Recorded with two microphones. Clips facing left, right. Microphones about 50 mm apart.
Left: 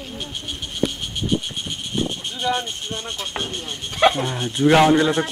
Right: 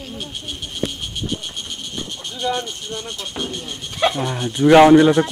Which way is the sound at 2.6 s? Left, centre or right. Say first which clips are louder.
Even; left.